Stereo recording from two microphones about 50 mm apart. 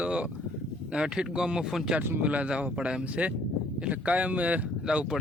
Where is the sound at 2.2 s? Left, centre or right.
Right.